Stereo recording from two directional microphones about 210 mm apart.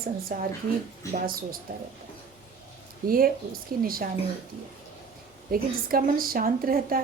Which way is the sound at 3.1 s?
45° right (ahead or behind).